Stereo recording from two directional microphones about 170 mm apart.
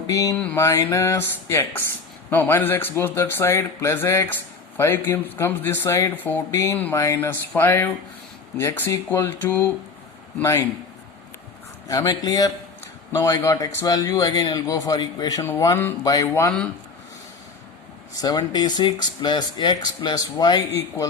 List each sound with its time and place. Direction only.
0.1 s a man's voice: 20° left (ahead or behind)
11.9 s a man's voice: 20° left (ahead or behind)
18.2 s a man's voice: 25° left (ahead or behind)